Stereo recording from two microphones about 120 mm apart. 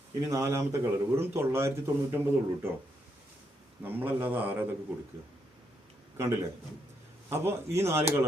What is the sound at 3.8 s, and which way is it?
Speech, 15° right (ahead or behind).